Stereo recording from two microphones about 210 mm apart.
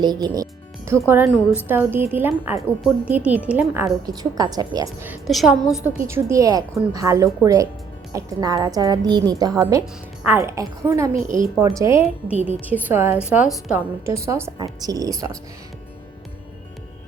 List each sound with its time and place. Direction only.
0.0 s a woman's voice: 20° right (ahead or behind)
4.0 s a woman's voice: 20° right (ahead or behind); by 5.5 s centre (ahead or behind)
5.6 s a woman's voice: 15° left (ahead or behind)
6.0 s a woman's voice: 15° right (ahead or behind)
11.1 s a woman's voice: 40° right (ahead or behind)
11.6 s a woman's voice: 15° right (ahead or behind)